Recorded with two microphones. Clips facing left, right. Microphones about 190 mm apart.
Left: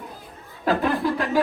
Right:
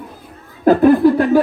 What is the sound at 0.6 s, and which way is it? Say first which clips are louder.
Speech: right 11 dB; 50° right (ahead or behind).